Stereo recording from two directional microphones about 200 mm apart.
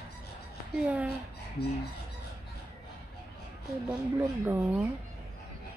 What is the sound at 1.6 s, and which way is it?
Chicken, 55° left (ahead or behind).